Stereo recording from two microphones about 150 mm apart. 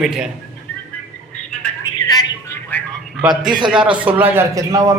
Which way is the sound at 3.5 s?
30° right (ahead or behind).